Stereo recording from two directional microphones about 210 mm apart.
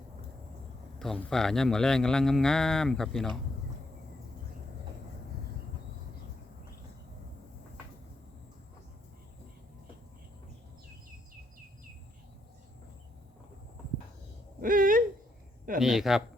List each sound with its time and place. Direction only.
0.9 s a man's voice: centre (ahead or behind)
14.6 s hoot: 40° right (ahead or behind)
15.8 s a man's voice: centre (ahead or behind)